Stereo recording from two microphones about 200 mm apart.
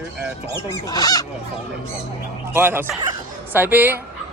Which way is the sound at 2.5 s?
10° right (ahead or behind).